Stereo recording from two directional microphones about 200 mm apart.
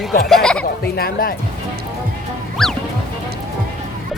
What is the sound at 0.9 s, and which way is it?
Speech, 50° left (ahead or behind).